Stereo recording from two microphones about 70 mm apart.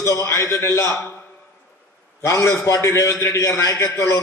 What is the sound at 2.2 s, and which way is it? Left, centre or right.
A man's voice, left.